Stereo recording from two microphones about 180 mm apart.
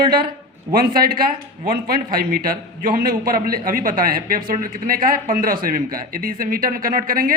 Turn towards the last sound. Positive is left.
turn(degrees=-50)  # may be behind; listen again after turning